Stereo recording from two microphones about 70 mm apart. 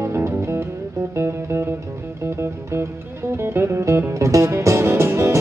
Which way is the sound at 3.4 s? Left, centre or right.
Right.